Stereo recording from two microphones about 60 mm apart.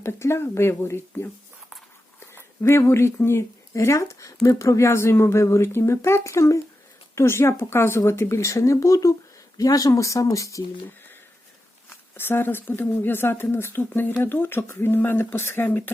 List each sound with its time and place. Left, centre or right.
0.0 s speech: left
2.3 s speech: left
7.2 s speech: left
9.6 s speech: left
12.1 s speech: left